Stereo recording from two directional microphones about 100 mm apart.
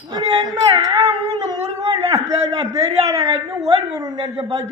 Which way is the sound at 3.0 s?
35° right (ahead or behind).